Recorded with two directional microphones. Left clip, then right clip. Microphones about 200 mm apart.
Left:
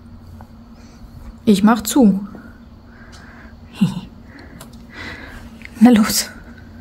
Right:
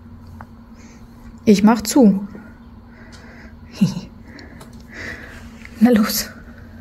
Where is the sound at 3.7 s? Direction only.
Centre (ahead or behind).